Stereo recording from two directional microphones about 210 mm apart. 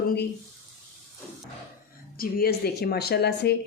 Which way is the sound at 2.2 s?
45° left (ahead or behind).